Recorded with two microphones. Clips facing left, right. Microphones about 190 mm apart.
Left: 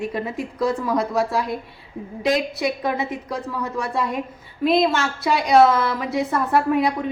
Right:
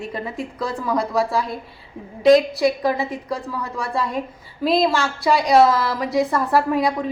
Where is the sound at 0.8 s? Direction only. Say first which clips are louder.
Even; centre (ahead or behind).